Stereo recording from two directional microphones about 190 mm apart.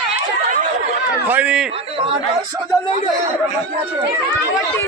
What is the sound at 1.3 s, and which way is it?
Speech, 10° right (ahead or behind).